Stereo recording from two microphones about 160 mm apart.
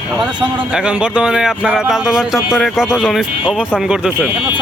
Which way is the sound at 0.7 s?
5° right (ahead or behind).